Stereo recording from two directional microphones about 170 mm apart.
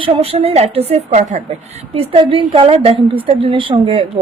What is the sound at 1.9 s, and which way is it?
A woman's voice, 30° right (ahead or behind).